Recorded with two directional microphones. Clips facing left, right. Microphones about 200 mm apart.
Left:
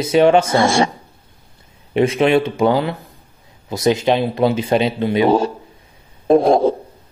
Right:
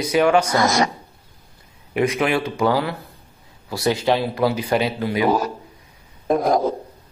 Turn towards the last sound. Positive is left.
turn(degrees=30)  # may be behind; listen again after turning